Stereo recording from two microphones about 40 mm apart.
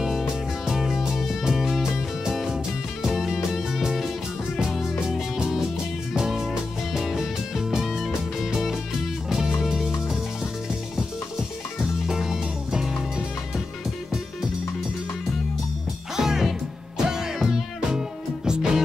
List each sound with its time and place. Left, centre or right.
0.7 s music: centre
5.0 s music: centre
12.1 s music: centre
16.2 s music: centre